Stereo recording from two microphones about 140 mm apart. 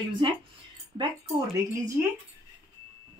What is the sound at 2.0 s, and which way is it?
Speech, 10° right (ahead or behind).